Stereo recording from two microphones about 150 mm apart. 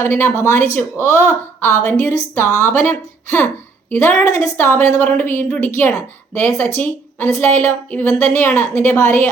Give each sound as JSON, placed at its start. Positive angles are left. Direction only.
{"t": 0.0, "sound": "a woman's voice", "side_deg": 15}